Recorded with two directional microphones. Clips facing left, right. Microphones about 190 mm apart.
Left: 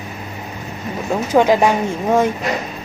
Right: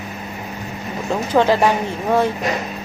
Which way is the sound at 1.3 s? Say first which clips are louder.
Left 2 dB; 15° left (ahead or behind).